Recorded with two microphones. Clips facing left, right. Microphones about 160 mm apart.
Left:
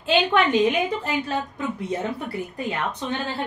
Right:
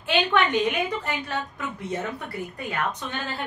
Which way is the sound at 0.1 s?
30° left (ahead or behind).